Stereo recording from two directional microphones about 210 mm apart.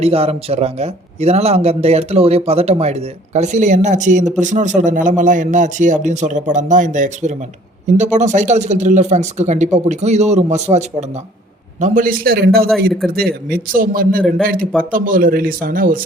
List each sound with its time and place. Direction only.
0.0 s a man's voice: 30° right (ahead or behind)
14.2 s a man's voice: centre (ahead or behind)
14.4 s a man's voice: 45° right (ahead or behind)